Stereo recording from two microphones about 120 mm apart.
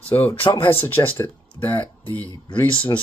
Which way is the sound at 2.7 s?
45° left (ahead or behind).